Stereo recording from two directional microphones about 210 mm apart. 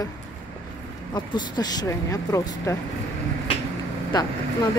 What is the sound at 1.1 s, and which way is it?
Speech, 20° left (ahead or behind).